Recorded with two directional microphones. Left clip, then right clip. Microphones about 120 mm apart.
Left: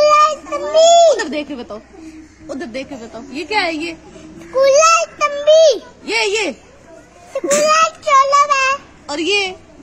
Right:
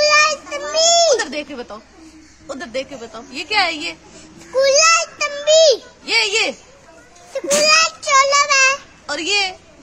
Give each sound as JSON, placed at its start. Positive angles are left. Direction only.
{"t": 0.0, "sound": "child singing", "side_deg": -35}
{"t": 0.7, "sound": "a sound", "side_deg": -35}
{"t": 2.4, "sound": "a woman's voice", "side_deg": -45}
{"t": 4.2, "sound": "a sound", "side_deg": -30}
{"t": 6.0, "sound": "a woman's voice", "side_deg": -45}
{"t": 7.6, "sound": "child singing", "side_deg": -30}
{"t": 9.2, "sound": "a woman's voice", "side_deg": -45}